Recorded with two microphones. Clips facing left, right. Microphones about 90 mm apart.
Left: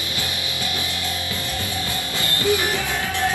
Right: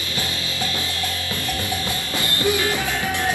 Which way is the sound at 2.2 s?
20° right (ahead or behind).